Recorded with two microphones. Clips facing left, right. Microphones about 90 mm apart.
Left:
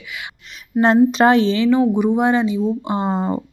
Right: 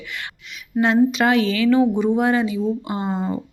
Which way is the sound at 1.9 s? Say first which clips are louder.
Left 2 dB; 15° left (ahead or behind).